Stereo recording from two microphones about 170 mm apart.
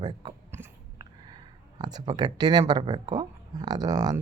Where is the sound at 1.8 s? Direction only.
25° right (ahead or behind).